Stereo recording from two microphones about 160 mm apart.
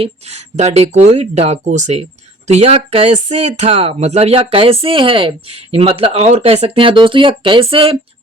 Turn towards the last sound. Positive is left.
turn(degrees=-35)  # may be behind; listen again after turning